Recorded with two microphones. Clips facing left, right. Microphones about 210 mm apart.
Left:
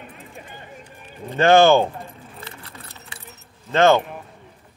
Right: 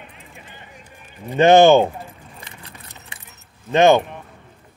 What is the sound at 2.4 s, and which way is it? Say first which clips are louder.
Keys jangling: left 2 dB; 15° right (ahead or behind).